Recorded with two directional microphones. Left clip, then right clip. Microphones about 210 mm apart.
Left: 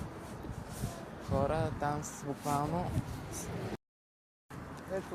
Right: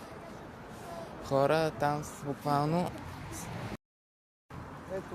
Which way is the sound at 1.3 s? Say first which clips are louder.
Right 6 dB; 60° right (ahead or behind).